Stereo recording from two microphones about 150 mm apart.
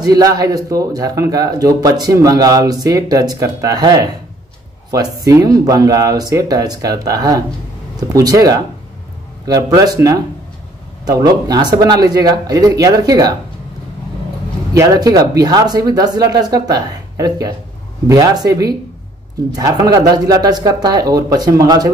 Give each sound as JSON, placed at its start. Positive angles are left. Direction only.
{"t": 0.0, "sound": "speech", "side_deg": -25}
{"t": 14.7, "sound": "speech", "side_deg": -20}